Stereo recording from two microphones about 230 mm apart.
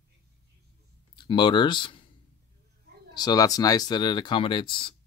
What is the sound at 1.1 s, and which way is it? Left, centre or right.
Speech, centre.